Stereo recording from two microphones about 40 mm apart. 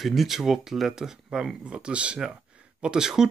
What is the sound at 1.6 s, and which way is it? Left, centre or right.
Speech, right.